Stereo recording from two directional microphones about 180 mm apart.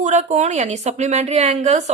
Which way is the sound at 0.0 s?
40° right (ahead or behind).